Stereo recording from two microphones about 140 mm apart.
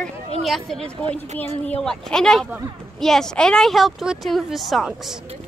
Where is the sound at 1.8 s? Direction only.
5° left (ahead or behind).